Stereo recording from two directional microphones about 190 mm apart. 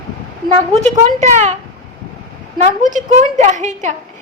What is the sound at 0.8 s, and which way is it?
Speech, 40° right (ahead or behind).